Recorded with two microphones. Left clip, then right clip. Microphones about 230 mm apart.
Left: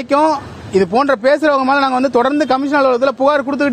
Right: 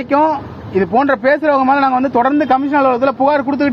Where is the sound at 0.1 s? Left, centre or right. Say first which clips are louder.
Even; left.